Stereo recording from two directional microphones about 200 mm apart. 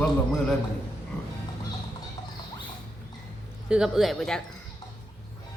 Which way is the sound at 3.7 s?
Centre (ahead or behind).